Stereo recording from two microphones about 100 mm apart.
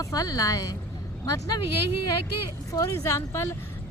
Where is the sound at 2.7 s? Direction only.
35° left (ahead or behind).